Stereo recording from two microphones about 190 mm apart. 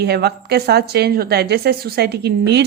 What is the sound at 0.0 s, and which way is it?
A woman's voice, 60° right (ahead or behind).